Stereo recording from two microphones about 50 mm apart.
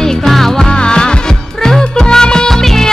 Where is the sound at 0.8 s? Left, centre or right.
Centre.